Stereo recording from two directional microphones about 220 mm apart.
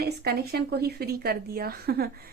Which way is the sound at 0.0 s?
45° right (ahead or behind).